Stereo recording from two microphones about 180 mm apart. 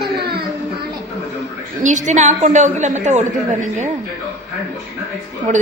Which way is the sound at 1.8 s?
40° right (ahead or behind).